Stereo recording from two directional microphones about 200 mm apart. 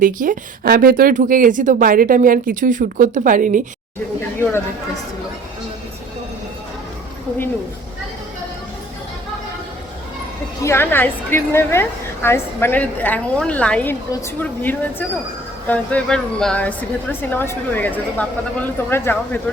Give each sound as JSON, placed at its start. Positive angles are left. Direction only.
{"t": 0.0, "sound": "speech", "side_deg": -40}
{"t": 10.6, "sound": "a woman's voice", "side_deg": 10}